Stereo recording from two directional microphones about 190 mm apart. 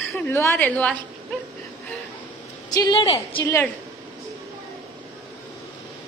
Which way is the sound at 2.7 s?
20° left (ahead or behind).